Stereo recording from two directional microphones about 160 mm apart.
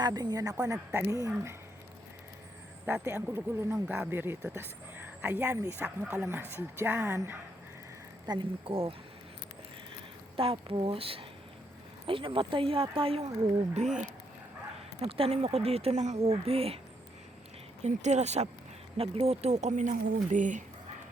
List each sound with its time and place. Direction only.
0.0 s a woman's voice: 25° right (ahead or behind)
2.8 s speech: 15° right (ahead or behind)
8.3 s speech: 30° right (ahead or behind)
10.3 s speech: 35° right (ahead or behind)
13.7 s speech: 45° right (ahead or behind)
15.0 s speech: 40° right (ahead or behind)
17.8 s speech: 45° right (ahead or behind)